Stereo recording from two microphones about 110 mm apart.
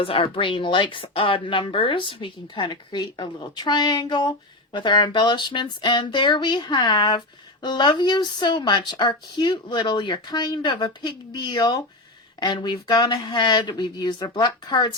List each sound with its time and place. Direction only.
0.0 s speech: 55° left (ahead or behind)